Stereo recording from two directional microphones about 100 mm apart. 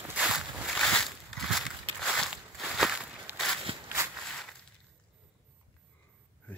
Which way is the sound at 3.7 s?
65° right (ahead or behind).